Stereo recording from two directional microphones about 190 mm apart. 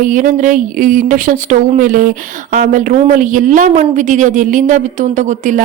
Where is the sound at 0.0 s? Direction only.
45° right (ahead or behind).